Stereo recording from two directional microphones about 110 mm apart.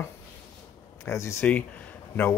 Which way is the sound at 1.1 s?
25° left (ahead or behind).